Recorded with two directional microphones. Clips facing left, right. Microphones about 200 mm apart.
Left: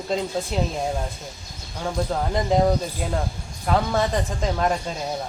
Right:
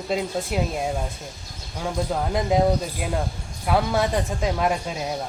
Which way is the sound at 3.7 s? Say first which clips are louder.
Even; 5° right (ahead or behind).